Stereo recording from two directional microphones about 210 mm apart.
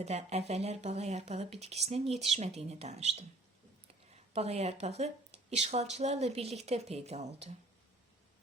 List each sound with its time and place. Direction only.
0.0 s speech: 30° right (ahead or behind)